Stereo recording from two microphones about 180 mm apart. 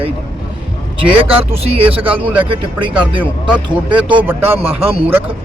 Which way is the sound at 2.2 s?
10° right (ahead or behind).